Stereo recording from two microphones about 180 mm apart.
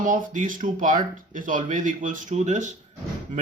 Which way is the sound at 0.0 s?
45° right (ahead or behind).